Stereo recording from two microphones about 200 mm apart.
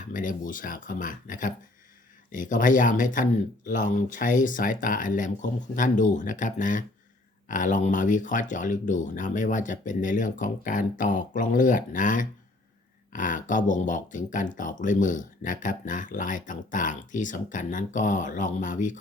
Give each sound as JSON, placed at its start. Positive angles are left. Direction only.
{"t": 0.1, "sound": "speech", "side_deg": 40}